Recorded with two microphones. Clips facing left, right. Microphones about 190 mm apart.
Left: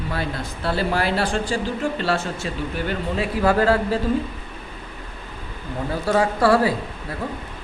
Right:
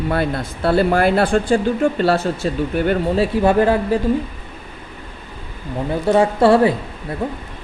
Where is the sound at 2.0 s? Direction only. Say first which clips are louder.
Right 7 dB; 40° right (ahead or behind).